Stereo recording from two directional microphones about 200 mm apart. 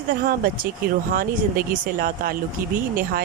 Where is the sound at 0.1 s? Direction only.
50° right (ahead or behind).